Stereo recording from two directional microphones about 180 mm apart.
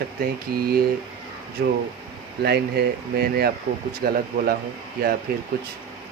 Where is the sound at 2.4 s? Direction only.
60° right (ahead or behind).